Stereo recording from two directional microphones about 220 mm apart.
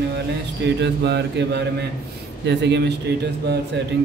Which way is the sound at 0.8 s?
50° right (ahead or behind).